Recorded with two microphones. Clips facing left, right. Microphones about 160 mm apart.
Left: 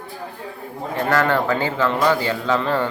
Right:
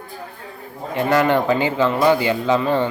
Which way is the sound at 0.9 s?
20° right (ahead or behind).